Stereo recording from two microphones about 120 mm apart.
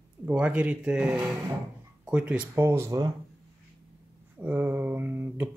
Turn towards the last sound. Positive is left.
turn(degrees=-15)  # may be behind; listen again after turning